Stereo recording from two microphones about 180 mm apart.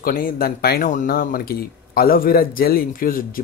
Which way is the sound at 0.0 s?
55° left (ahead or behind).